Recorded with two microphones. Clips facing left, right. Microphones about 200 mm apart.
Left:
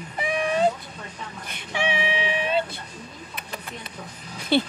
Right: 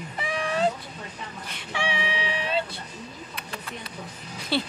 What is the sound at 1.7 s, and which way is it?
Vehicle, 20° left (ahead or behind).